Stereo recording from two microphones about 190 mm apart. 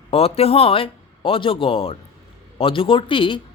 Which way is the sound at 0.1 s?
30° left (ahead or behind).